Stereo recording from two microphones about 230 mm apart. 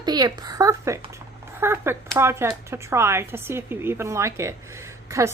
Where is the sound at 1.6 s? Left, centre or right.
Centre.